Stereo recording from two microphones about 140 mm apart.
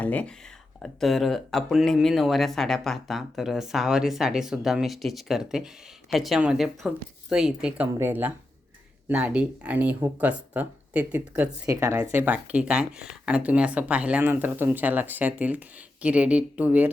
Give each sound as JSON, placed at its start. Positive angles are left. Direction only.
{"t": 0.0, "sound": "speech", "side_deg": 10}
{"t": 11.7, "sound": "speech", "side_deg": -20}